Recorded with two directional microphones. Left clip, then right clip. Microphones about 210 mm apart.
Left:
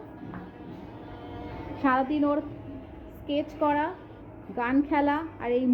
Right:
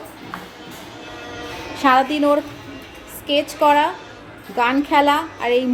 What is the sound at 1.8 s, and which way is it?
A woman's voice, 15° right (ahead or behind).